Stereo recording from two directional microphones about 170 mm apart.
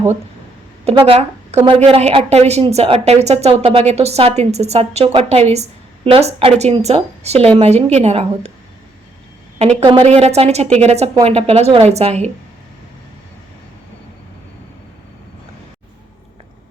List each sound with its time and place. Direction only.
0.9 s a woman's voice: 35° right (ahead or behind)
9.8 s speech: 35° right (ahead or behind)